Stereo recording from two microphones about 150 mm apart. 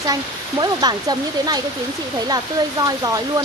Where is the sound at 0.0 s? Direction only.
25° right (ahead or behind).